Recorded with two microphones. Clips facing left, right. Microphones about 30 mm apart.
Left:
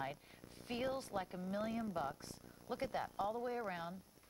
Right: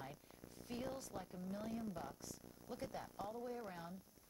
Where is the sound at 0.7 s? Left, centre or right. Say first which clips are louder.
Left 6 dB; left.